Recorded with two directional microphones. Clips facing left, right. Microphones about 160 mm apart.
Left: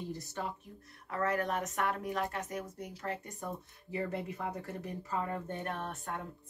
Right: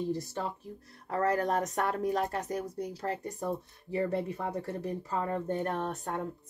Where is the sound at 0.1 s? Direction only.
35° right (ahead or behind).